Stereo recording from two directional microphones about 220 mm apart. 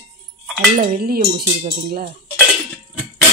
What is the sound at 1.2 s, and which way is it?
Speech, 25° right (ahead or behind).